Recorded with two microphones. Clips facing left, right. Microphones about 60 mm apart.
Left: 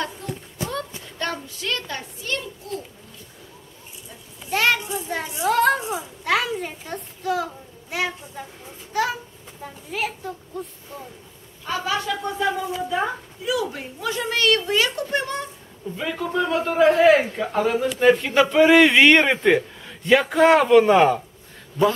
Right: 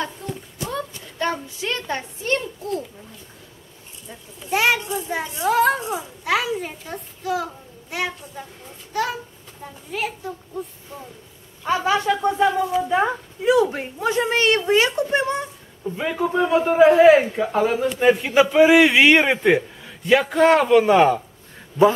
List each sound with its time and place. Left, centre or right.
0.0 s a sound: centre
1.1 s a woman's voice: centre; by 2.8 s right
4.5 s a child's voice: centre
4.9 s speech: centre
5.8 s a child's voice: centre
6.2 s speech: centre
11.6 s a woman's voice: right; by 21.2 s centre